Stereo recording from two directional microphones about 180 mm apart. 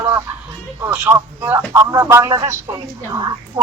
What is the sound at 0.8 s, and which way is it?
Speech, 20° right (ahead or behind).